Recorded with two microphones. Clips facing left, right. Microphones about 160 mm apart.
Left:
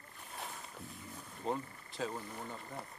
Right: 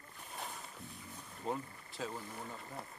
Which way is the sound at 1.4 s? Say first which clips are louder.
Left 2 dB; centre (ahead or behind).